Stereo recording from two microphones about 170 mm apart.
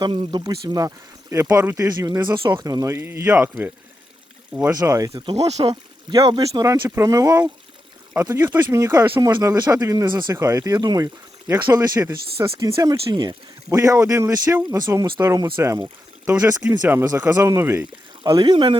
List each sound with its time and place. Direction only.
0.0 s speech: 30° right (ahead or behind)
4.7 s speech: 20° right (ahead or behind)
5.3 s speech: 40° right (ahead or behind)
6.1 s speech: 25° right (ahead or behind)
18.2 s speech: 25° right (ahead or behind)